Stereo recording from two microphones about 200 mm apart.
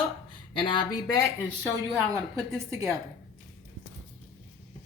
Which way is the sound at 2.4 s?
15° right (ahead or behind).